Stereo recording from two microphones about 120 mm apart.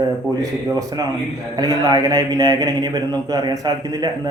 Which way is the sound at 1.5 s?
35° right (ahead or behind).